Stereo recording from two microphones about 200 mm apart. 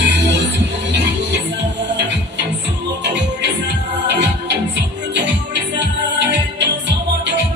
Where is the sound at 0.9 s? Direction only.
60° right (ahead or behind).